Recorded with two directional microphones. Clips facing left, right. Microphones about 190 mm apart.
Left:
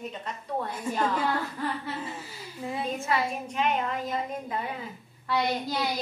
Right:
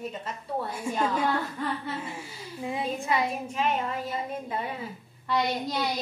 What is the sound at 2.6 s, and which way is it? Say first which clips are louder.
A woman's voice: right 1 dB; 15° right (ahead or behind).